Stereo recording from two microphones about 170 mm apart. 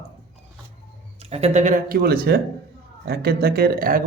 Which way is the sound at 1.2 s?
40° right (ahead or behind).